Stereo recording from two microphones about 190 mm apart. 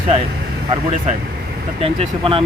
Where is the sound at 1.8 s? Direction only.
30° right (ahead or behind).